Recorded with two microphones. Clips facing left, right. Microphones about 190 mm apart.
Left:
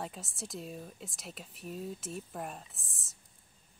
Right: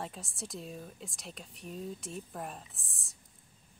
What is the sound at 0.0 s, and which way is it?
Speech, centre (ahead or behind).